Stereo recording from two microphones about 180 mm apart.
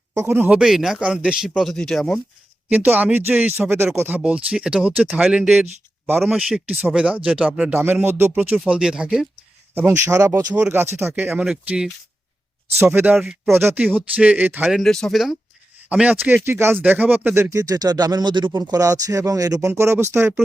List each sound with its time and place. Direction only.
0.1 s a man's voice: 15° right (ahead or behind); by 2.2 s 5° left (ahead or behind)
2.6 s a man's voice: 10° right (ahead or behind)